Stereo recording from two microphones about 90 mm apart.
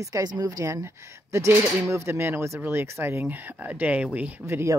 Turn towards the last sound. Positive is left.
turn(degrees=-30)  # may be behind; listen again after turning